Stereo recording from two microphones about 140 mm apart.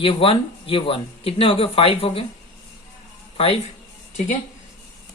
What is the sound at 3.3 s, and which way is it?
Speech, 40° left (ahead or behind).